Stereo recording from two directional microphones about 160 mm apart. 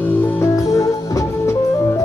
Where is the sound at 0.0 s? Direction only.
10° left (ahead or behind).